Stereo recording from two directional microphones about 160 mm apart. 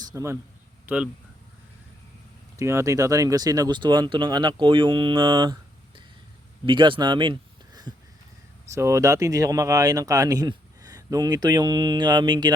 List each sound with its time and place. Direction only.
0.0 s a man's voice: 20° right (ahead or behind)
0.9 s speech: 5° right (ahead or behind)
2.6 s speech: 20° right (ahead or behind)
6.7 s speech: 30° right (ahead or behind)